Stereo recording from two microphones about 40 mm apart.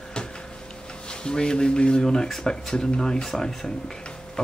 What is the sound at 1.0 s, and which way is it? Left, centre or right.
Speech, left.